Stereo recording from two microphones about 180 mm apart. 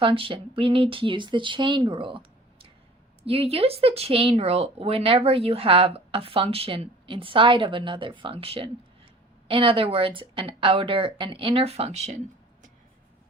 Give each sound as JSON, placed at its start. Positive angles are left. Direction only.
{"t": 0.0, "sound": "speech", "side_deg": -30}